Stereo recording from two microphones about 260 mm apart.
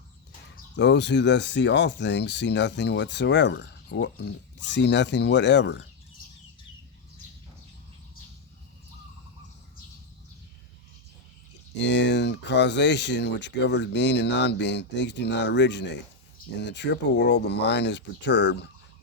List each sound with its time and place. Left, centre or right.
0.8 s speech: left
11.8 s speech: left